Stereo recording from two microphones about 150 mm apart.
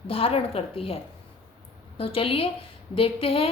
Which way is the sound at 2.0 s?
40° left (ahead or behind).